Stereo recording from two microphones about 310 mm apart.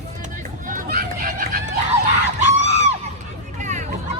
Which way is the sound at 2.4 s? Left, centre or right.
Right.